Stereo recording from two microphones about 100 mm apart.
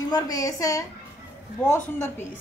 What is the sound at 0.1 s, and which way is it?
Speech, 35° left (ahead or behind).